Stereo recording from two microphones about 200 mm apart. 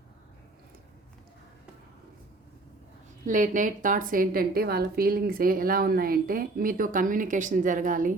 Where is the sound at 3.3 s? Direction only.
40° right (ahead or behind).